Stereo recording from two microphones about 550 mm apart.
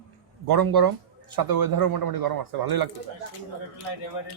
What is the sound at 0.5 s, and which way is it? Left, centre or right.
Speech, right.